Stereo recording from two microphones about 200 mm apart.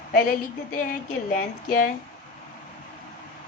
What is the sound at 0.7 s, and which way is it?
Speech, 45° left (ahead or behind).